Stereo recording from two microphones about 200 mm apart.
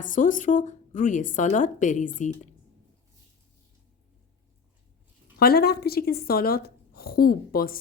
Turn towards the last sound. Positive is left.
turn(degrees=45)  # may be behind; listen again after turning